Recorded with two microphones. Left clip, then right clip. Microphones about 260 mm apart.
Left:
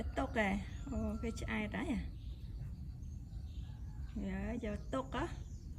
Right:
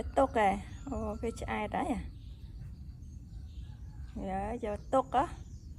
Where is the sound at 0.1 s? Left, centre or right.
Centre.